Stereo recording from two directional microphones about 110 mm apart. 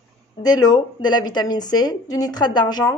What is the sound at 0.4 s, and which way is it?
A woman's voice, 35° left (ahead or behind).